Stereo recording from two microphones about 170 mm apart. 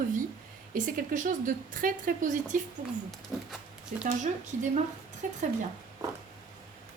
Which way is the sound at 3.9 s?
55° right (ahead or behind).